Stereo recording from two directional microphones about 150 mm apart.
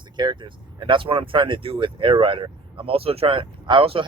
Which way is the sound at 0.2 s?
30° right (ahead or behind).